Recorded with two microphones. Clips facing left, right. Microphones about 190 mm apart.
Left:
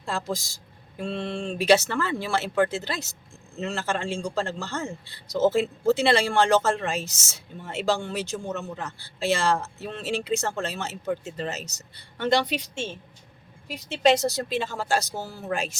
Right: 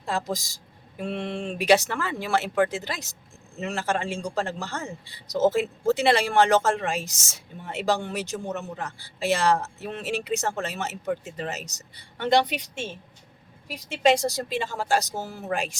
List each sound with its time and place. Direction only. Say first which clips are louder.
0.0 s speech: right 1 dB; 15° right (ahead or behind)